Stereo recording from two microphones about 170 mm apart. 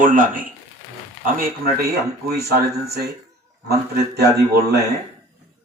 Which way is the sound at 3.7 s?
70° right (ahead or behind).